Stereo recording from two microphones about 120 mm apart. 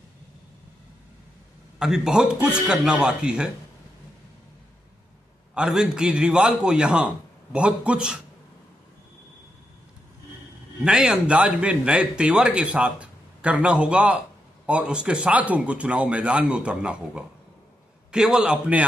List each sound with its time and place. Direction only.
1.8 s a man's voice: 5° right (ahead or behind)
5.5 s a man's voice: 5° right (ahead or behind)
10.8 s a man's voice: 5° right (ahead or behind)